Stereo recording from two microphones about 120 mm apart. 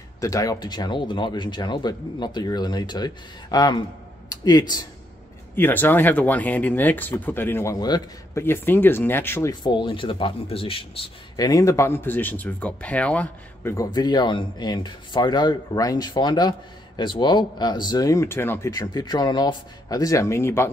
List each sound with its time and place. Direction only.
0.2 s speech: 30° left (ahead or behind)
5.6 s speech: 15° left (ahead or behind)
9.5 s speech: 40° left (ahead or behind)
11.3 s speech: 30° left (ahead or behind); by 13.3 s 10° left (ahead or behind)
13.8 s speech: 35° left (ahead or behind); by 18.7 s 20° left (ahead or behind)
18.7 s speech: 35° left (ahead or behind)